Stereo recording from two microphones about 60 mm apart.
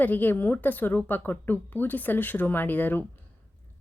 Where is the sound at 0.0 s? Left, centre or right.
Left.